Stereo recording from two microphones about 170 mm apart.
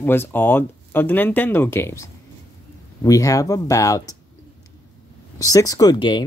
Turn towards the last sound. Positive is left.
turn(degrees=25)  # may be behind; listen again after turning